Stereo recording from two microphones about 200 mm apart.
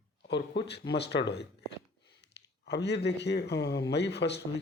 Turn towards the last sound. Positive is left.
turn(degrees=60)  # may be behind; listen again after turning